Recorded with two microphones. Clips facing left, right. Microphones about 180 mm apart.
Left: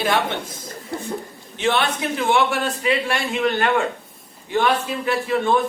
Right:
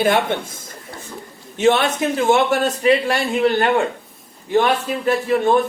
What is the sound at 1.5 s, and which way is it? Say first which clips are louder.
A man's voice: right 5 dB; 45° right (ahead or behind).